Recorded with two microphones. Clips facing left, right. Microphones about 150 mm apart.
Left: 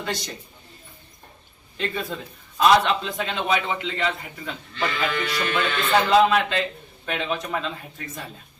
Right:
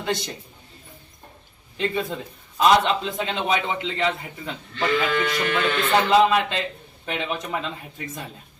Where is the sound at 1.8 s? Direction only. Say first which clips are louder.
Right 3 dB; 20° right (ahead or behind).